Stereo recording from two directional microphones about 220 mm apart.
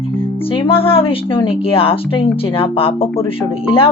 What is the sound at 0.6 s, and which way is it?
Speech, 25° left (ahead or behind).